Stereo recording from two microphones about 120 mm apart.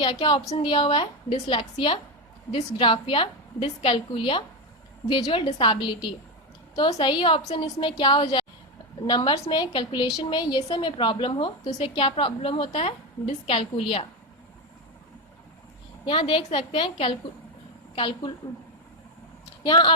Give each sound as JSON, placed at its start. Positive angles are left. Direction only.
{"t": 0.0, "sound": "a woman's voice", "side_deg": 40}
{"t": 12.8, "sound": "a woman's voice", "side_deg": 60}
{"t": 16.0, "sound": "a woman's voice", "side_deg": 45}
{"t": 19.6, "sound": "a woman's voice", "side_deg": 40}